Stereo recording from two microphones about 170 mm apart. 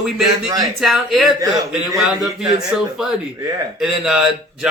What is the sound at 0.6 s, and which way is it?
Speech, centre (ahead or behind).